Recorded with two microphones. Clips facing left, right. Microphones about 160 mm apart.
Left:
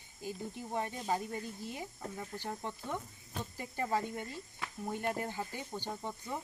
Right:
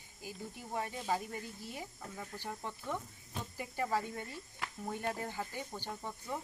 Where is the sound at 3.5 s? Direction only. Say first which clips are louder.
Right 1 dB; 10° right (ahead or behind).